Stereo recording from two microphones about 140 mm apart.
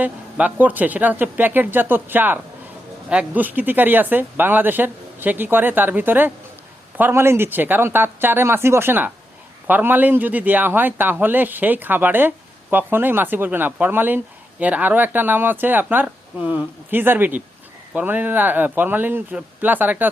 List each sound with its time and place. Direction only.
0.0 s speech: 10° right (ahead or behind)